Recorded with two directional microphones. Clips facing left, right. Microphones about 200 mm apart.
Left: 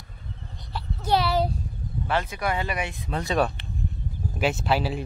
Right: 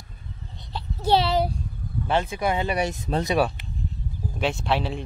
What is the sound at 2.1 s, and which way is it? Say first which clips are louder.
Speech: right 3 dB; 25° right (ahead or behind).